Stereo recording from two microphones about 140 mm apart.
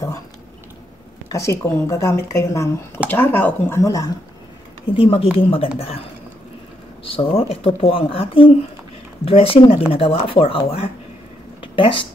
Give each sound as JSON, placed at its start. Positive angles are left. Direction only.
{"t": 1.3, "sound": "speech", "side_deg": 20}
{"t": 3.8, "sound": "speech", "side_deg": 25}
{"t": 4.9, "sound": "speech", "side_deg": 40}
{"t": 7.1, "sound": "speech", "side_deg": 40}